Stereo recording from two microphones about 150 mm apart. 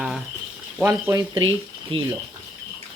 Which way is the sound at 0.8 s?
25° right (ahead or behind).